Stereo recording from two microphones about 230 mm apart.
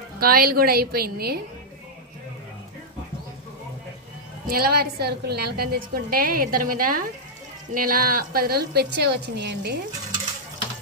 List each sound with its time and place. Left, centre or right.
0.2 s a woman's voice: right
4.5 s a woman's voice: right